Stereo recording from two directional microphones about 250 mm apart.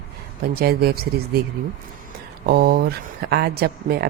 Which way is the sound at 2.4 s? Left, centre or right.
Right.